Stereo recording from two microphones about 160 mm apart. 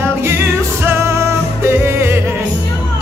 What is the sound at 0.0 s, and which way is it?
Music, 15° right (ahead or behind).